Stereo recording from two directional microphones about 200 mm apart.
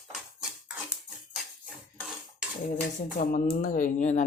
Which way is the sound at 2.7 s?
45° left (ahead or behind).